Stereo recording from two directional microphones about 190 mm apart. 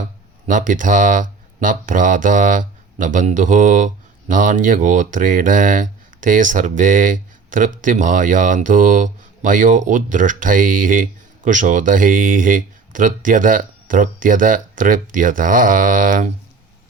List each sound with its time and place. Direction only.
0.4 s speech: 45° right (ahead or behind)